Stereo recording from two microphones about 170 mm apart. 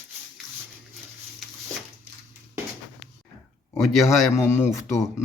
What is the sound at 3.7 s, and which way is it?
Speech, centre (ahead or behind).